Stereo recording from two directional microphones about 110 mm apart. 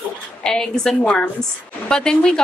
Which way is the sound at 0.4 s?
5° left (ahead or behind).